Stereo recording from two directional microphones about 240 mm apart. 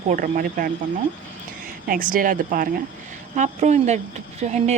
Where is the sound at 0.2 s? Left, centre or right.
Right.